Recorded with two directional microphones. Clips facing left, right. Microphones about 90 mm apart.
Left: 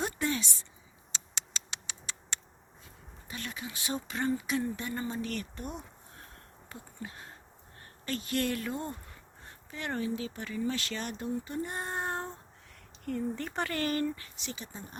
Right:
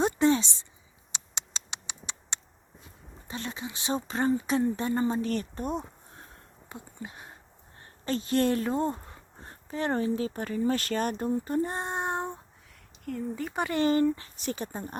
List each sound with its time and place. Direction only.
0.0 s a sound: 30° right (ahead or behind)
3.2 s speech: 30° right (ahead or behind)
6.7 s a sound: 20° right (ahead or behind)
7.8 s speech: 30° right (ahead or behind)
11.9 s child singing: 20° right (ahead or behind)
13.1 s speech: 5° right (ahead or behind); by 14.3 s 20° right (ahead or behind)
14.3 s speech: 50° right (ahead or behind)